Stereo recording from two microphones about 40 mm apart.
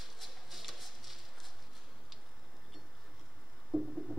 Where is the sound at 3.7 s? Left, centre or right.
Right.